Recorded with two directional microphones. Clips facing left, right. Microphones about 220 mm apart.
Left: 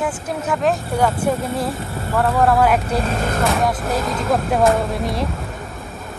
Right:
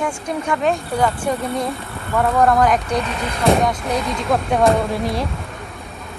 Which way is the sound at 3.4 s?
5° left (ahead or behind).